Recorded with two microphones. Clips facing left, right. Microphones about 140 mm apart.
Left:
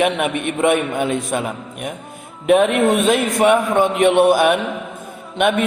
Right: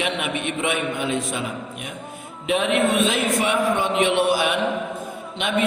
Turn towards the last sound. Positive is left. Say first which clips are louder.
# left 9 dB
turn(degrees=55)  # may be behind; listen again after turning